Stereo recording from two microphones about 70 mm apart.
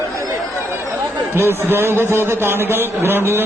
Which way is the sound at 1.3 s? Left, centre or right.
Right.